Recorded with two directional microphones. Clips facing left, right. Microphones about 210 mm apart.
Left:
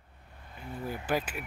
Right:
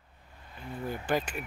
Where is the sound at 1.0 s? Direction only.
5° left (ahead or behind).